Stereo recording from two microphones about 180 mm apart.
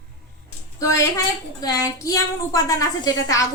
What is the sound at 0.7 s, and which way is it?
A woman's voice, 20° left (ahead or behind).